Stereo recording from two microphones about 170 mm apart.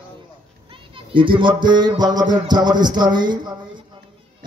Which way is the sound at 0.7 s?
30° right (ahead or behind).